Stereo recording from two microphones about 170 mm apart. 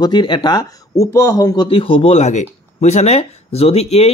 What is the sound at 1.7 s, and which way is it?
Speech, 30° left (ahead or behind).